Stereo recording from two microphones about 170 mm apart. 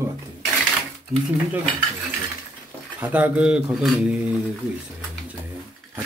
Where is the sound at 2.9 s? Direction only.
10° right (ahead or behind).